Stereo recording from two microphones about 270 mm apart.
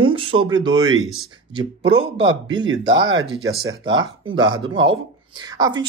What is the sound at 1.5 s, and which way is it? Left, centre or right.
Speech, centre.